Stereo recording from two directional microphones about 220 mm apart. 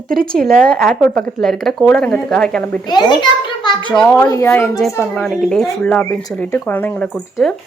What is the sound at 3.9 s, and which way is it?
A woman's voice, 5° left (ahead or behind).